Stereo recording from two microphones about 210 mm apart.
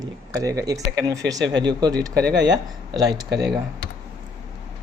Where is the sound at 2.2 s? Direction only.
55° right (ahead or behind).